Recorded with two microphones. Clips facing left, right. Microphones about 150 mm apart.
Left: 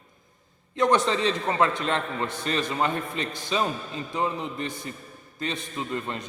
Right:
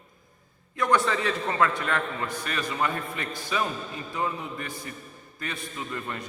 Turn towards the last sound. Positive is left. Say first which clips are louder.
# left 3 dB
turn(degrees=25)  # may be behind; listen again after turning